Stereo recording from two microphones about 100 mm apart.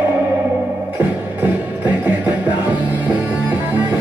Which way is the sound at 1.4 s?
15° right (ahead or behind).